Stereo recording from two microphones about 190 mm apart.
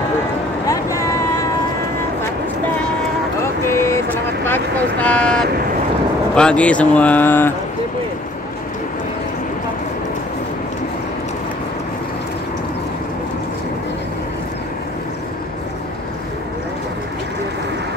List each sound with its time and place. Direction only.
0.7 s vehicle: 15° left (ahead or behind)
3.6 s vehicle: 15° left (ahead or behind)
6.3 s speech: 5° left (ahead or behind)